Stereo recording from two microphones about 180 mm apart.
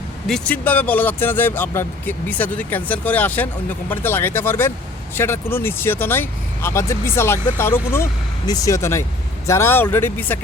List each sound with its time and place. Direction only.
0.3 s speech: 5° left (ahead or behind)